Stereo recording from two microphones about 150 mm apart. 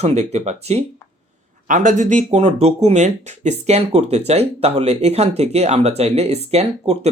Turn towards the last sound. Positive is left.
turn(degrees=-45)  # may be behind; listen again after turning